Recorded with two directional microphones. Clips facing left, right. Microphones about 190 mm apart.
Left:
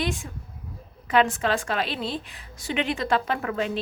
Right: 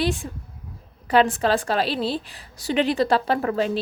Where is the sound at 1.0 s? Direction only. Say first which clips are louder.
Right 3 dB; 35° right (ahead or behind).